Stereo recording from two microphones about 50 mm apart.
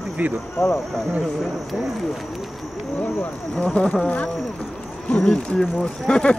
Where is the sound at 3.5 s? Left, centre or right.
Left.